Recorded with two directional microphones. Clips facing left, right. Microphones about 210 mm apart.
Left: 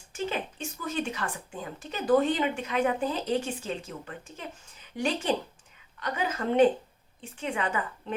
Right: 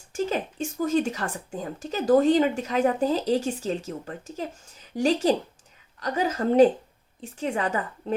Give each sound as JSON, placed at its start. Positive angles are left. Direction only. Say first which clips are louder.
{"t": 0.1, "sound": "speech", "louder": "right 5 dB", "side_deg": -45}